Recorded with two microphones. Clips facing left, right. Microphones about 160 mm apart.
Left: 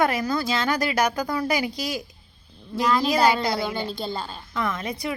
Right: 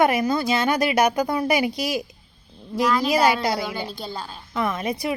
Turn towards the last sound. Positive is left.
turn(degrees=-20)  # may be behind; listen again after turning